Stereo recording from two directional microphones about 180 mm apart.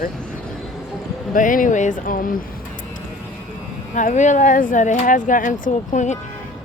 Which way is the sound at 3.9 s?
45° left (ahead or behind).